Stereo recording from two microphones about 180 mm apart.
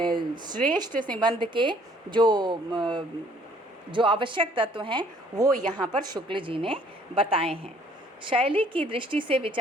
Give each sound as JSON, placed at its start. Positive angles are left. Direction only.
{"t": 0.2, "sound": "speech", "side_deg": -25}
{"t": 0.9, "sound": "a woman's voice", "side_deg": 10}
{"t": 1.2, "sound": "a woman's voice", "side_deg": -25}